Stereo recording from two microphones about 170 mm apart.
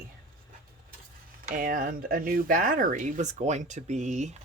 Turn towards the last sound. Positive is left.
turn(degrees=-45)  # may be behind; listen again after turning